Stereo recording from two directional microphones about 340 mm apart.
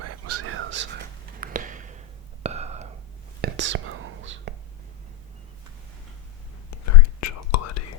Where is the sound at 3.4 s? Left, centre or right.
Right.